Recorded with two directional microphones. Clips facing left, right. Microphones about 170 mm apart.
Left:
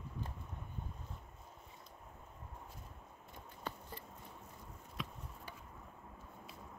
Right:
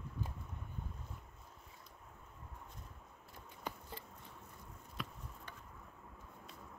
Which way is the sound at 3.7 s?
15° right (ahead or behind).